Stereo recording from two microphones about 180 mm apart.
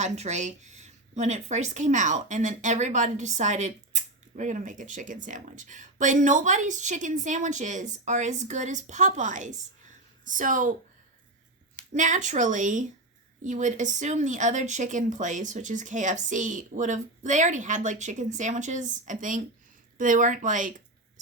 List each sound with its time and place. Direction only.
0.0 s speech: 40° right (ahead or behind)
11.9 s speech: 45° right (ahead or behind)